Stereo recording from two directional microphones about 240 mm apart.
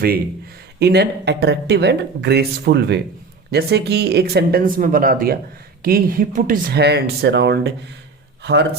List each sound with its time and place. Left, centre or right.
0.8 s speech: right